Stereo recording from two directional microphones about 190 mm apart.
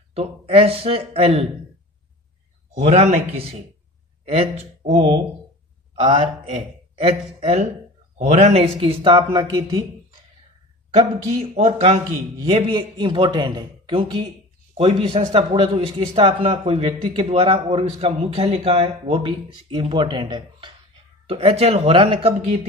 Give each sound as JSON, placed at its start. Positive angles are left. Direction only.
{"t": 0.1, "sound": "speech", "side_deg": -30}
{"t": 2.7, "sound": "a man's voice", "side_deg": -35}
{"t": 11.5, "sound": "a man's voice", "side_deg": -30}